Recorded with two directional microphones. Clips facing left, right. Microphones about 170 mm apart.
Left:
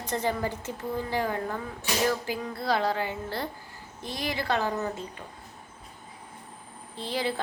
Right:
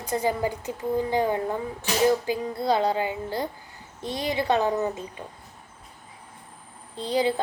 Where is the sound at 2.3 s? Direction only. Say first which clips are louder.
Right 4 dB; 20° right (ahead or behind).